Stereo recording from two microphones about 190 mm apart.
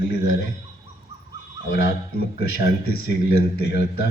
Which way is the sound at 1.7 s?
50° left (ahead or behind).